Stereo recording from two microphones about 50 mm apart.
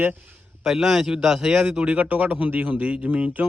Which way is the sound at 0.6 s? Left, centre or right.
Centre.